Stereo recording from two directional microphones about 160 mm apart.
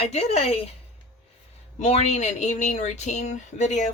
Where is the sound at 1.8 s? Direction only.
45° left (ahead or behind).